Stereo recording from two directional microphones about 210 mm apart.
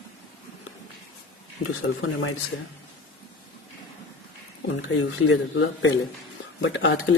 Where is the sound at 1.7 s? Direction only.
75° left (ahead or behind).